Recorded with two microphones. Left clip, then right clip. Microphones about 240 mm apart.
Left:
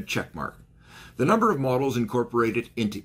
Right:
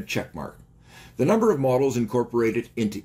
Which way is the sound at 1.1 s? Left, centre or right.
Centre.